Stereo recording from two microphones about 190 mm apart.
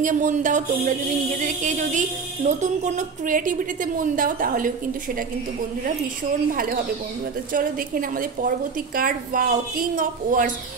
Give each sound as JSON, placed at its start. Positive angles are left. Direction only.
{"t": 0.0, "sound": "a woman's voice", "side_deg": -40}
{"t": 6.5, "sound": "a woman's voice", "side_deg": -50}